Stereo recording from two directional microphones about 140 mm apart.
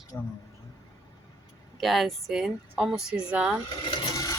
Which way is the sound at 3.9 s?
30° left (ahead or behind).